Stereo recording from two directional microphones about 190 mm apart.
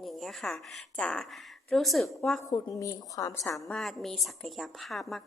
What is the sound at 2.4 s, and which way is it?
A woman's voice, 20° left (ahead or behind).